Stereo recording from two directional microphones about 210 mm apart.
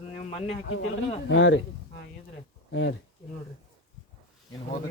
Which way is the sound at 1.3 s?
60° left (ahead or behind).